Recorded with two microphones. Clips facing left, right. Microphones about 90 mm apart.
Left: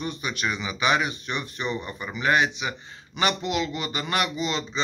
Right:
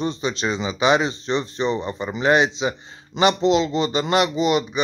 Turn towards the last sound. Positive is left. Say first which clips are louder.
# right 8 dB
turn(degrees=-20)  # may be behind; listen again after turning